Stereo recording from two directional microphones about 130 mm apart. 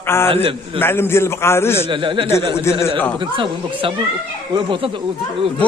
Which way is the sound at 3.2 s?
40° right (ahead or behind).